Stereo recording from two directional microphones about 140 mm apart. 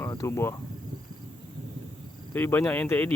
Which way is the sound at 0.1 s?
20° left (ahead or behind).